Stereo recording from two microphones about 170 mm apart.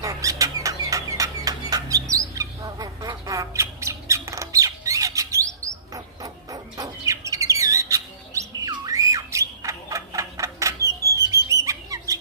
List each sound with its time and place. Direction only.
0.0 s bird: 20° right (ahead or behind)
11.4 s music: 20° right (ahead or behind)